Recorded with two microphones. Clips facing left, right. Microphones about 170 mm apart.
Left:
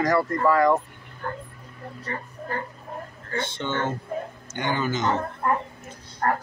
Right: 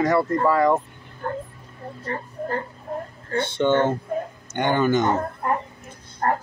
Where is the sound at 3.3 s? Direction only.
55° right (ahead or behind).